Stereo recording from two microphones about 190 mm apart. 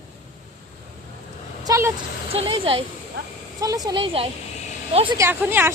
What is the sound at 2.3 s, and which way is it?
Speech, 30° right (ahead or behind).